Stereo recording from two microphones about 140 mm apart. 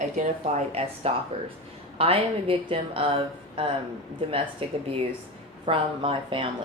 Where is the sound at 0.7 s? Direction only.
45° right (ahead or behind).